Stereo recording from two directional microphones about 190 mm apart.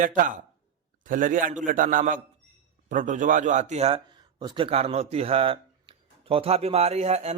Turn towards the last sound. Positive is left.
turn(degrees=-35)  # may be behind; listen again after turning